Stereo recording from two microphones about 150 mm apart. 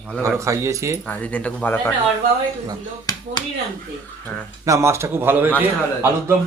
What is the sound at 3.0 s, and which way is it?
Speech, 30° left (ahead or behind).